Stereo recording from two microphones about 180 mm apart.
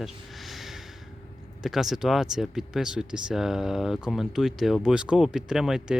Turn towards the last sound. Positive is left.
turn(degrees=-5)  # may be behind; listen again after turning